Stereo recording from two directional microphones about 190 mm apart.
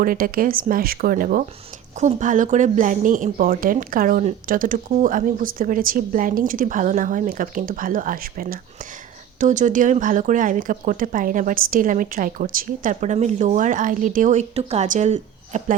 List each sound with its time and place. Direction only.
0.0 s speech: 50° right (ahead or behind)